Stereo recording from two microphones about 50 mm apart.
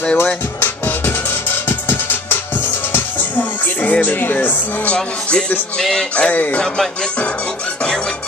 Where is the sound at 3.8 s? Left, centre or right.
Left.